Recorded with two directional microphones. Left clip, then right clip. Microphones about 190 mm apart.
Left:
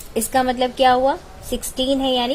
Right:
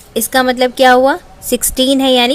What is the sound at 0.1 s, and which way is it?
A woman's voice, 30° right (ahead or behind).